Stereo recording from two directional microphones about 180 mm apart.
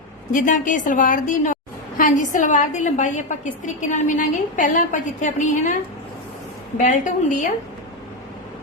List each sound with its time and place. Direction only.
0.3 s a woman's voice: 45° left (ahead or behind)
6.7 s a woman's voice: 45° left (ahead or behind)